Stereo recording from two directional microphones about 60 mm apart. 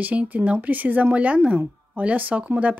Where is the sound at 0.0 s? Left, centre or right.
Right.